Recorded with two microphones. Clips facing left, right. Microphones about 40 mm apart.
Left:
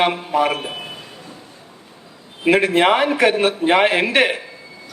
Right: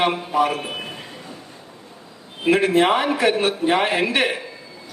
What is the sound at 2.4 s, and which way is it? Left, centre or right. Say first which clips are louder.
A man's voice: left 2 dB; left.